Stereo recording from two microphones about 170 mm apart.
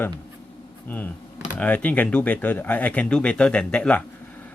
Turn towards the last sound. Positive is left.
turn(degrees=10)  # may be behind; listen again after turning